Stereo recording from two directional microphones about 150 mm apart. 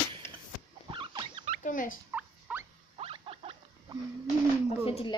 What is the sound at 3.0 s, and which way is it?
Rodents, 40° right (ahead or behind).